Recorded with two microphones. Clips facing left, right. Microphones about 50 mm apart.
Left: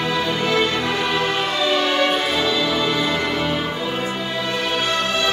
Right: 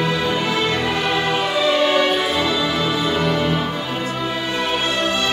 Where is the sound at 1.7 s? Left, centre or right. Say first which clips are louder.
Right 1 dB; centre.